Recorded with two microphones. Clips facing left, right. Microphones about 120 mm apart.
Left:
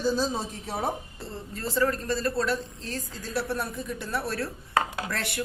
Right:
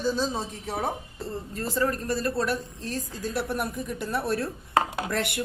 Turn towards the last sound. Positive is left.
turn(degrees=-20)  # may be behind; listen again after turning